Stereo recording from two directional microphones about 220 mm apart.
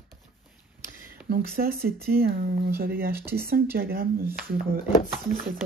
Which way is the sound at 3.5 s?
45° right (ahead or behind).